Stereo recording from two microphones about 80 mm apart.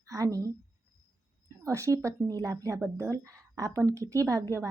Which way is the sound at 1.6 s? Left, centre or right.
Right.